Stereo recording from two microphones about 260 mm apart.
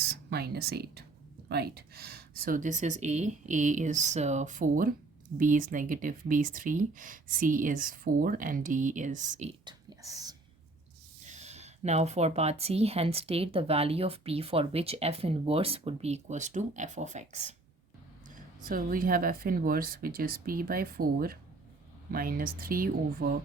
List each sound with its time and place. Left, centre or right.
0.1 s speech: right; by 10.3 s centre
11.3 s speech: right